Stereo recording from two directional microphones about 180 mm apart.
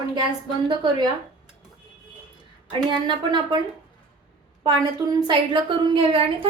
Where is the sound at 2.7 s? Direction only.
25° right (ahead or behind).